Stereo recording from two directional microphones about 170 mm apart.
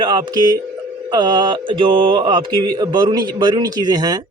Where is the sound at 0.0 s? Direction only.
30° right (ahead or behind).